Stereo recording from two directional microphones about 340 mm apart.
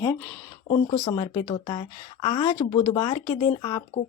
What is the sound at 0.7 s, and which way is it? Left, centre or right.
A woman's voice, centre.